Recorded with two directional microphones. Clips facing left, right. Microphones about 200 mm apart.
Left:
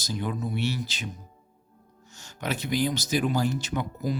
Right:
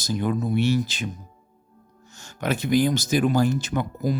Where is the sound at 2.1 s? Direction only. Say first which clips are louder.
Right 5 dB; 50° right (ahead or behind).